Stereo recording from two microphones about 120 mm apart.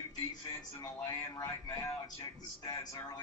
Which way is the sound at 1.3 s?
35° left (ahead or behind).